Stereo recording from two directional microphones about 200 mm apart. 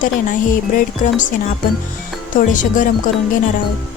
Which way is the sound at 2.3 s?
40° left (ahead or behind).